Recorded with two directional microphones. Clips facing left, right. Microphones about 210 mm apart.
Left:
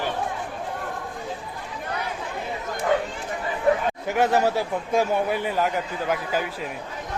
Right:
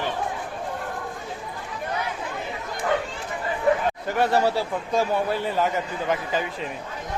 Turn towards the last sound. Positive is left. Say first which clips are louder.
# even
turn(degrees=5)  # may be behind; listen again after turning